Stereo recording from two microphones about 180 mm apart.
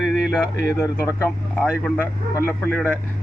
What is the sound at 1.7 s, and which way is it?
Speech, 5° right (ahead or behind).